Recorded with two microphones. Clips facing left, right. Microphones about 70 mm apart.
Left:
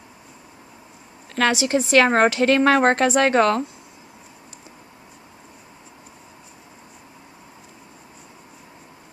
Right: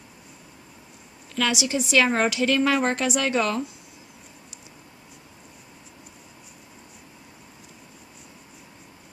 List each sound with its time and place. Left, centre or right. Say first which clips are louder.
1.3 s a woman's voice: left 5 dB; left